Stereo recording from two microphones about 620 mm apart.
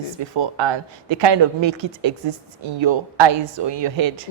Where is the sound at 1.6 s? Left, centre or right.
Right.